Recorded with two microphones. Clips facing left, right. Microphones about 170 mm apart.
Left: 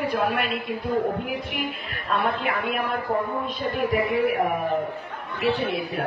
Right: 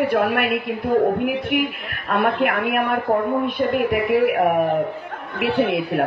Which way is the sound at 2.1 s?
70° right (ahead or behind).